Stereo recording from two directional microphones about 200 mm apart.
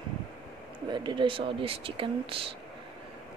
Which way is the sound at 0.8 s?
20° right (ahead or behind).